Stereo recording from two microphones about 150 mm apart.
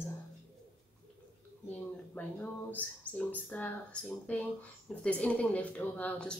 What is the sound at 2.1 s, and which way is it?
Speech, 10° left (ahead or behind).